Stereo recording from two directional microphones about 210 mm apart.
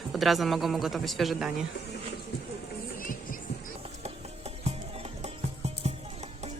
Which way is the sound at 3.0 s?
40° left (ahead or behind).